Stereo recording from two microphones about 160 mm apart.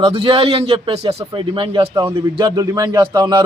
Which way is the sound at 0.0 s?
35° right (ahead or behind).